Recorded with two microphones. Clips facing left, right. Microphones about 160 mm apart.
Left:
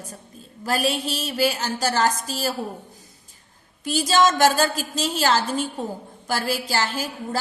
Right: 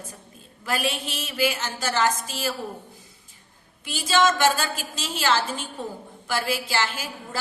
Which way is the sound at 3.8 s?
40° left (ahead or behind).